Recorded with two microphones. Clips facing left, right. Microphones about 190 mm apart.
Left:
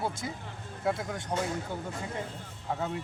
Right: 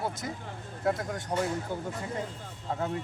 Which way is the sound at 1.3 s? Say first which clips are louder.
Right 2 dB; 5° right (ahead or behind).